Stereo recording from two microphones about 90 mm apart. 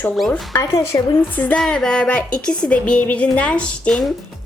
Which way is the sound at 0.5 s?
35° left (ahead or behind).